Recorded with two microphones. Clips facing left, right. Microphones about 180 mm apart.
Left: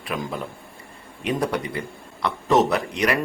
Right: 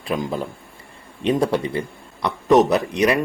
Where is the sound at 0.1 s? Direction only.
30° right (ahead or behind).